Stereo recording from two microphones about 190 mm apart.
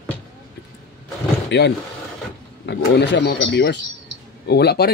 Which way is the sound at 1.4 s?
65° left (ahead or behind).